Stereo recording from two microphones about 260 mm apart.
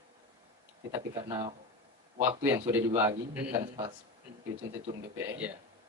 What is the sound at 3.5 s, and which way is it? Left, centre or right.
Speech, centre.